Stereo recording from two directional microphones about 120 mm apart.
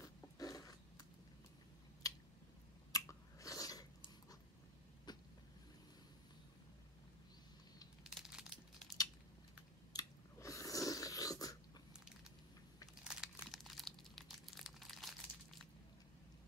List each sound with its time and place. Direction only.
0.0 s roaring cats: 30° left (ahead or behind)
2.0 s scissors: 30° left (ahead or behind)
2.9 s chewing: 30° left (ahead or behind)
5.1 s vehicle: 35° left (ahead or behind)
8.0 s crumpling: 5° right (ahead or behind)
9.9 s a sound: 30° left (ahead or behind)
13.0 s crumpling: 5° right (ahead or behind)